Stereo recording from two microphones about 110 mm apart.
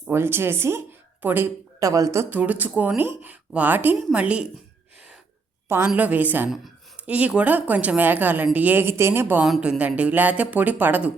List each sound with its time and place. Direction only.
0.1 s speech: 20° right (ahead or behind)
1.8 s speech: 30° right (ahead or behind)
2.3 s speech: 15° right (ahead or behind)
5.6 s a woman's voice: 20° right (ahead or behind)